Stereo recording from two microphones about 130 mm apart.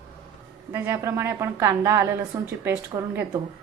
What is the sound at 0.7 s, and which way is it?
A woman's voice, 20° right (ahead or behind).